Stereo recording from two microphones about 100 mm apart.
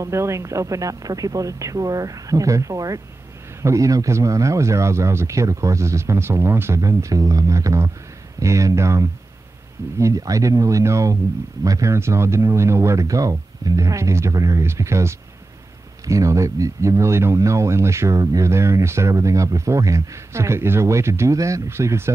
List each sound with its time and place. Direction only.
0.0 s speech: 30° right (ahead or behind)